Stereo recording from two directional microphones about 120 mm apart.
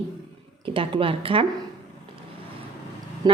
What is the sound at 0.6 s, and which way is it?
Speech, 45° right (ahead or behind).